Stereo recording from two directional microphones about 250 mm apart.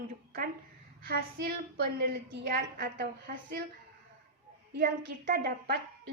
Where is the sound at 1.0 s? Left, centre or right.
Right.